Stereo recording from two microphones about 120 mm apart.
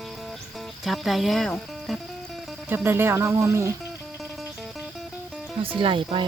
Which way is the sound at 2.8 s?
20° right (ahead or behind).